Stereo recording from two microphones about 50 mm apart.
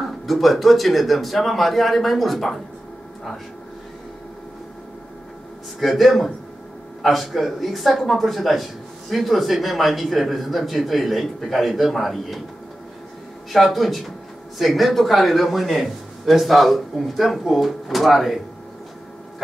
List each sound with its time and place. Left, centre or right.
0.3 s a man's voice: centre
5.8 s a man's voice: centre
13.5 s a man's voice: centre